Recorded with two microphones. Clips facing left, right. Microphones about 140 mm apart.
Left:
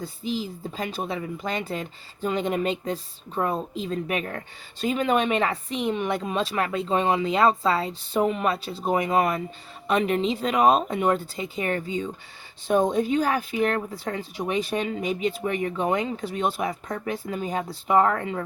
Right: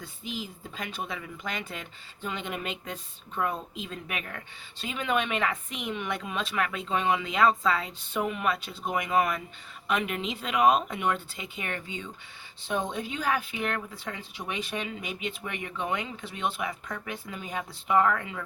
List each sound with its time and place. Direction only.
0.0 s speech: 35° left (ahead or behind)